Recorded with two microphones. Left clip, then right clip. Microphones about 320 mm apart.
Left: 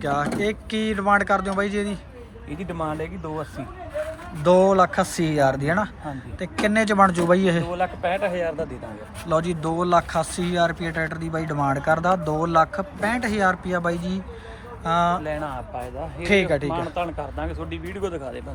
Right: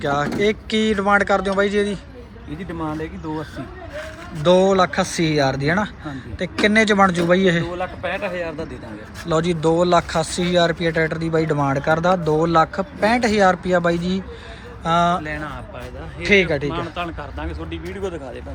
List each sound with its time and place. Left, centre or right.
0.0 s speech: centre
4.4 s speech: centre
8.4 s speech: left
9.2 s speech: centre
15.2 s speech: centre
16.9 s speech: centre